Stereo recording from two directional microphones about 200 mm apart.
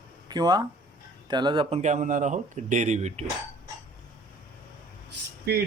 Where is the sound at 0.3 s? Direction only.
20° right (ahead or behind).